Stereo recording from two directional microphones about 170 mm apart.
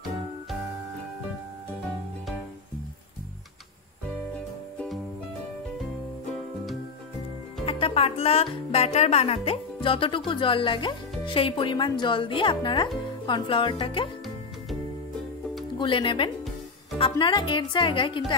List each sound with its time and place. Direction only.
4.7 s music: centre (ahead or behind)
7.6 s music: 35° left (ahead or behind)
13.3 s speech: 30° left (ahead or behind)
15.8 s speech: 30° left (ahead or behind)
17.0 s music: 25° left (ahead or behind)